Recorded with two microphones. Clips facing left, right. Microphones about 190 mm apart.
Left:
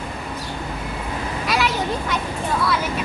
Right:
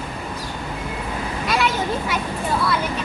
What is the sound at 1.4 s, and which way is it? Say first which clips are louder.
Vehicle: right 1 dB; centre (ahead or behind).